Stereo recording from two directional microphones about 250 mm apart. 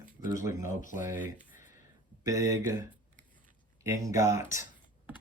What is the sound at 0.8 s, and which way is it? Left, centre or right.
Speech, left.